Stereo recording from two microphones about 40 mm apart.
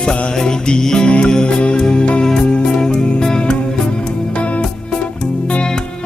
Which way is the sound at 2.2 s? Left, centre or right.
Centre.